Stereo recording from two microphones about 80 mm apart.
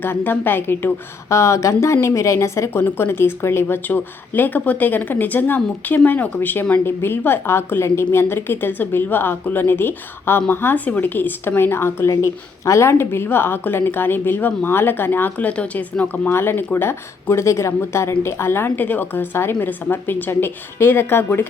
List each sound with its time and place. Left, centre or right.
0.0 s a woman's voice: left
1.3 s a woman's voice: left